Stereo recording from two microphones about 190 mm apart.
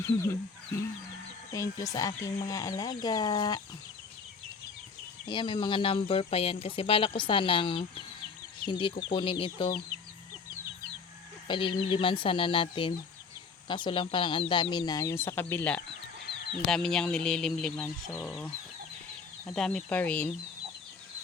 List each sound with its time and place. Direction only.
0.0 s speech: 15° left (ahead or behind)
1.5 s speech: 15° left (ahead or behind)
5.3 s speech: 25° left (ahead or behind)
11.4 s speech: 25° left (ahead or behind); by 20.3 s 5° left (ahead or behind)